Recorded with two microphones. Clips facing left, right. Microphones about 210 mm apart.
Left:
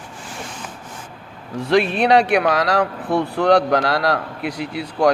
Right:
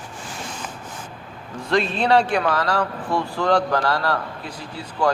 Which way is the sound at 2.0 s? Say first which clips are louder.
Left 3 dB; 80° left.